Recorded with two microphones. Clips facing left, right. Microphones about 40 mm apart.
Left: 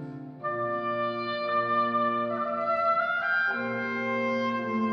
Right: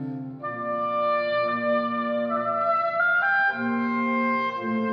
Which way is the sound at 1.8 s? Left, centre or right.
Centre.